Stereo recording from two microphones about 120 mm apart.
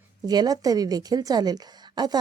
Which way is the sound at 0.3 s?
35° right (ahead or behind).